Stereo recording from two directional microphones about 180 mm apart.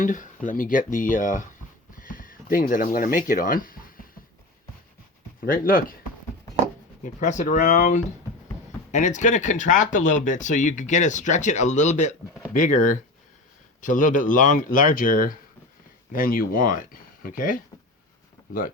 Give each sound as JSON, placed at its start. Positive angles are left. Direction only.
{"t": 0.0, "sound": "speech", "side_deg": 45}
{"t": 5.4, "sound": "speech", "side_deg": 50}
{"t": 7.0, "sound": "speech", "side_deg": 45}